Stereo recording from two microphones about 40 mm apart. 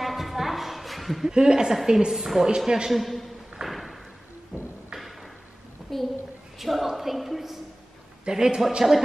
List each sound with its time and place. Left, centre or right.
0.0 s a sound: centre
1.3 s a woman's voice: centre
2.4 s a woman's voice: centre
2.9 s a man's voice: centre
3.6 s thump: centre
4.5 s music: centre
5.9 s a sound: centre
8.3 s a woman's voice: centre